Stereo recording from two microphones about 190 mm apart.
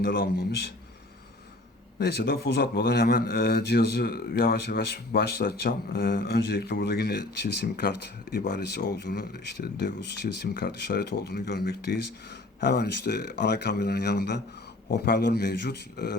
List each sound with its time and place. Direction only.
0.0 s a man's voice: 55° left (ahead or behind)
2.0 s a man's voice: 60° left (ahead or behind)